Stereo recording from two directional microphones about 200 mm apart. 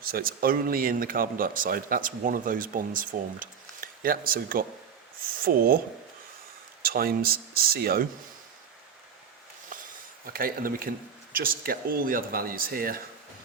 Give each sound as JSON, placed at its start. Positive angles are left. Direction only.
{"t": 0.0, "sound": "speech", "side_deg": -45}
{"t": 6.8, "sound": "speech", "side_deg": -50}
{"t": 10.2, "sound": "speech", "side_deg": -45}